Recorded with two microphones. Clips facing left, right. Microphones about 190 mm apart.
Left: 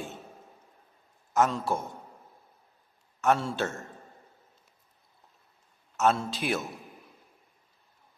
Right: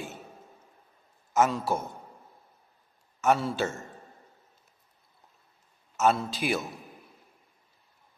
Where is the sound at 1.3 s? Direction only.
5° right (ahead or behind).